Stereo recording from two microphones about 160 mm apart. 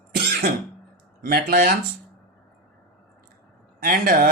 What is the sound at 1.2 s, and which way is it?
Speech, 70° right (ahead or behind).